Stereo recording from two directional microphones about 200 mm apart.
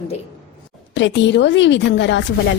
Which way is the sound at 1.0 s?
65° left (ahead or behind).